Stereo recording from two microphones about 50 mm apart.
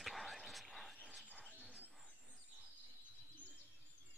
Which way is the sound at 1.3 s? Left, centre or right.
Right.